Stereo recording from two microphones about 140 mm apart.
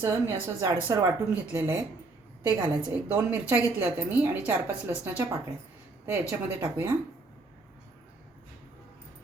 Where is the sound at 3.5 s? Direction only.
15° right (ahead or behind).